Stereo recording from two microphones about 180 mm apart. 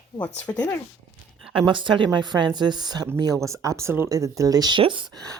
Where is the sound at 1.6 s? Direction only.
25° right (ahead or behind).